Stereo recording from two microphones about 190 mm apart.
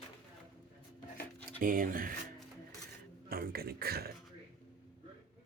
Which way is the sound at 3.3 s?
55° right (ahead or behind).